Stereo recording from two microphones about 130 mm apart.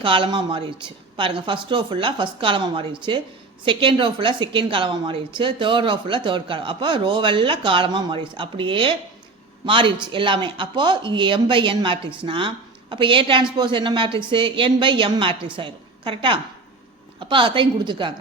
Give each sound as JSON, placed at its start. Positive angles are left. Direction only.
{"t": 0.0, "sound": "a woman's voice", "side_deg": -40}